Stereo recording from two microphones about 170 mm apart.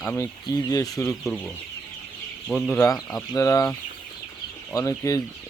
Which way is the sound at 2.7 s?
15° left (ahead or behind).